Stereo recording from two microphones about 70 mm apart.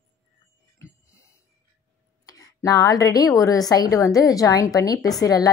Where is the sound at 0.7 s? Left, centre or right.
Left.